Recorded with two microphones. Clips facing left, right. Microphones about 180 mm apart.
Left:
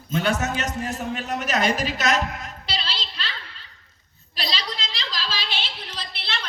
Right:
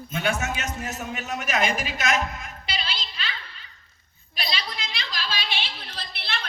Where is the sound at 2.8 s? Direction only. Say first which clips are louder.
Left 1 dB; 50° right (ahead or behind).